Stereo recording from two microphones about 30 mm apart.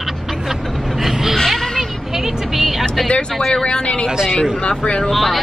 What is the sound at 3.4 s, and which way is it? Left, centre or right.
Speech, left.